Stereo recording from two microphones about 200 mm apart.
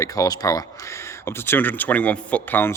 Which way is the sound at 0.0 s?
15° left (ahead or behind).